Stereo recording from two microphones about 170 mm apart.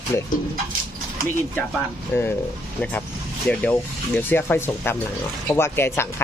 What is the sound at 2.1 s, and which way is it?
Speech, 10° left (ahead or behind).